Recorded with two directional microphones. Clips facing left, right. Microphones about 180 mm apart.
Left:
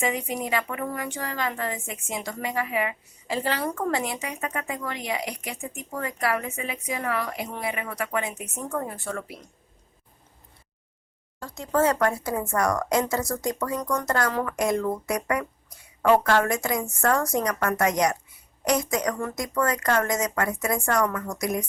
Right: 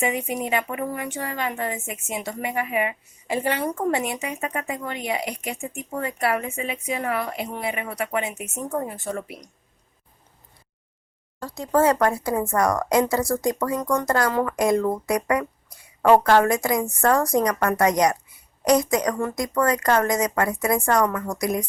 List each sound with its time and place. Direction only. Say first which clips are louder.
0.0 s a woman's voice: right 2 dB; 20° right (ahead or behind)
11.4 s a woman's voice: right 3 dB; 35° right (ahead or behind)